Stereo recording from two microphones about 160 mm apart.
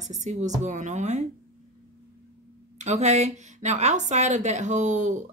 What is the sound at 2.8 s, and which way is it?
Speech, 45° right (ahead or behind).